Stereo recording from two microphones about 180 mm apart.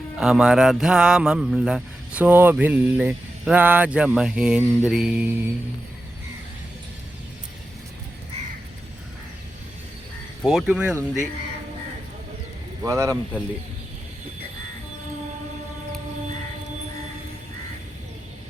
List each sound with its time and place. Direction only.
0.2 s mantra: 5° right (ahead or behind)
10.4 s mantra: 5° right (ahead or behind)
12.8 s speech: 15° right (ahead or behind)